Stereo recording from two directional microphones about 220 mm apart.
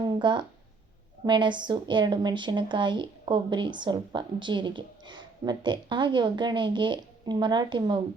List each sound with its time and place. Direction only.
0.0 s speech: 20° right (ahead or behind)